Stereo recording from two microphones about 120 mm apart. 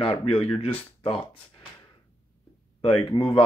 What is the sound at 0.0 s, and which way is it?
Speech, 50° left (ahead or behind).